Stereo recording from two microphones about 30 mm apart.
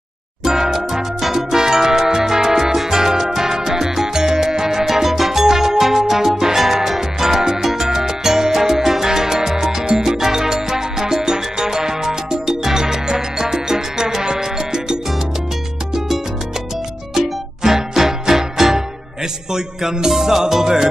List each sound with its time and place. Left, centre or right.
0.4 s music: centre
14.2 s salsa music: right
17.1 s music: centre